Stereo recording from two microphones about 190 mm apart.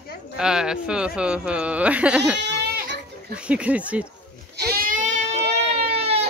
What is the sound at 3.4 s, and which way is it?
Speech, 5° right (ahead or behind).